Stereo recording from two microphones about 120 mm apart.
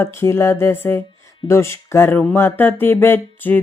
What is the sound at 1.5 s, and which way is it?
Speech, 20° left (ahead or behind).